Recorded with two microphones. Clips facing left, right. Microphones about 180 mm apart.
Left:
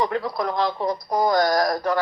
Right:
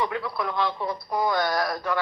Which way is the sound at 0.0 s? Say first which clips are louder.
Left 4 dB; 40° left (ahead or behind).